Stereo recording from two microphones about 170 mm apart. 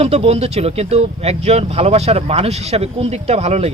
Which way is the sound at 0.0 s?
35° right (ahead or behind).